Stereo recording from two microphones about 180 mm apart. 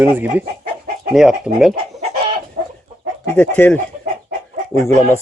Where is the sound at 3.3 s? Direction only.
10° left (ahead or behind).